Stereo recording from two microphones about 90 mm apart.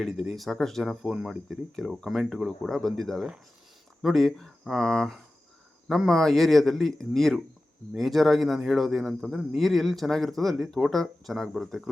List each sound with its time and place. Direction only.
0.0 s speech: centre (ahead or behind)